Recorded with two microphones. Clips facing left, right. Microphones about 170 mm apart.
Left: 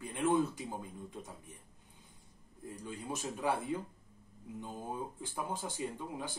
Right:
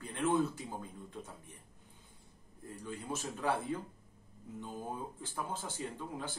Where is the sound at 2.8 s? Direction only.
15° left (ahead or behind).